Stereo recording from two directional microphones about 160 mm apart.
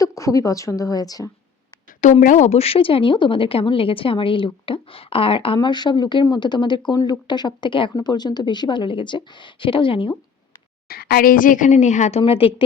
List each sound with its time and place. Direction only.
0.0 s speech: 20° left (ahead or behind)
2.0 s speech: 50° left (ahead or behind); by 10.2 s 30° left (ahead or behind)
10.8 s a woman's voice: 70° left (ahead or behind); by 12.2 s 50° left (ahead or behind)
12.2 s speech: 35° left (ahead or behind)